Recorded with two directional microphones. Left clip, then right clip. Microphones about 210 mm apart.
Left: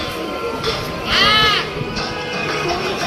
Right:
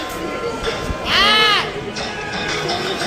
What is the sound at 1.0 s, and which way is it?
Music, 40° right (ahead or behind).